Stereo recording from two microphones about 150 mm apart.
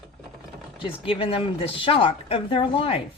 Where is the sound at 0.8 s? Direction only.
35° left (ahead or behind).